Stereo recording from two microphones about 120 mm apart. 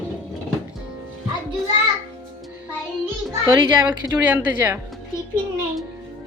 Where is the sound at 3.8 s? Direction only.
15° right (ahead or behind).